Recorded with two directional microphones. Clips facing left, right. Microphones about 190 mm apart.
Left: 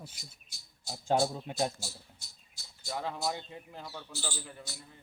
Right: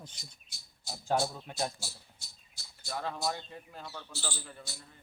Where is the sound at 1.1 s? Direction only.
20° left (ahead or behind).